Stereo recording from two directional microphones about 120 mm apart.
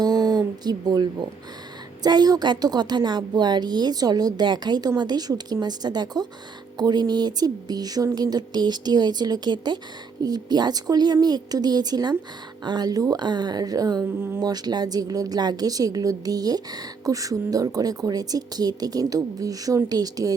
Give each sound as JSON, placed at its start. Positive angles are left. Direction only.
{"t": 0.0, "sound": "a sound", "side_deg": -35}
{"t": 2.0, "sound": "a woman's voice", "side_deg": -35}
{"t": 14.0, "sound": "speech", "side_deg": -20}
{"t": 14.4, "sound": "a woman's voice", "side_deg": -35}